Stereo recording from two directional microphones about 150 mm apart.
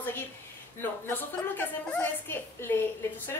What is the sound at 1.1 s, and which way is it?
A woman's voice, 10° left (ahead or behind).